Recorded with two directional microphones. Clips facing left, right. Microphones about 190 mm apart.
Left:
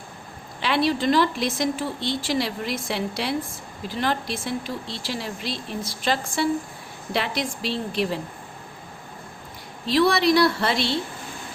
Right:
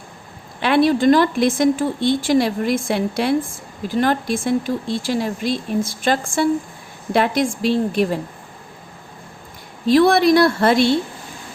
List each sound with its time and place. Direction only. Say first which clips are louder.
0.6 s a woman's voice: right 7 dB; 55° right (ahead or behind)
9.8 s a woman's voice: right 6 dB; 50° right (ahead or behind)